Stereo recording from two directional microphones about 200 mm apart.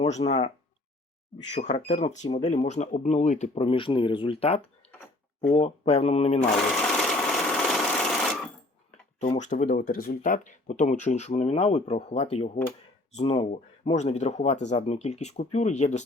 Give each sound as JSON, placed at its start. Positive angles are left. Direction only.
{"t": 0.0, "sound": "speech", "side_deg": 30}
{"t": 6.4, "sound": "sewing machine", "side_deg": 0}
{"t": 9.2, "sound": "speech", "side_deg": 35}